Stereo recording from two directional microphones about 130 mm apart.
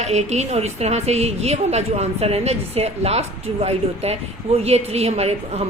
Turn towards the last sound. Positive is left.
turn(degrees=-55)  # may be behind; listen again after turning